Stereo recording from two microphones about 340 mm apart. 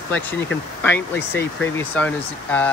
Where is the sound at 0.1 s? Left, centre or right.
Centre.